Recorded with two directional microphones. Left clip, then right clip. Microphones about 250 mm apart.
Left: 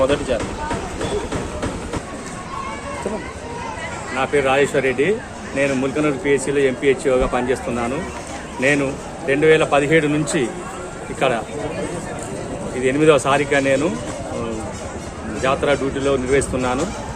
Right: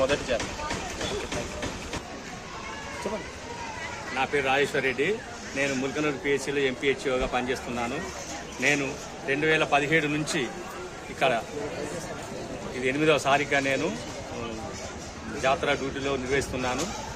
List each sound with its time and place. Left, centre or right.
4.1 s speech: centre
12.8 s speech: centre
15.4 s speech: centre